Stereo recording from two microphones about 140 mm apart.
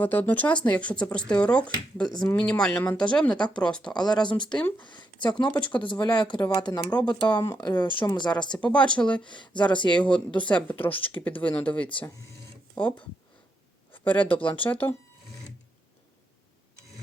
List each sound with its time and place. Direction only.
0.0 s speech: 15° left (ahead or behind)
3.3 s speech: 30° left (ahead or behind)
3.6 s speech: 5° left (ahead or behind)
3.9 s speech: 30° left (ahead or behind)
4.4 s speech: 5° left (ahead or behind)
4.8 s speech: 35° left (ahead or behind)
8.4 s speech: 5° left (ahead or behind)
9.2 s speech: 35° left (ahead or behind)
9.9 s speech: 10° left (ahead or behind)
13.9 s speech: 10° left (ahead or behind)
14.3 s speech: 40° left (ahead or behind)
14.6 s speech: 10° left (ahead or behind)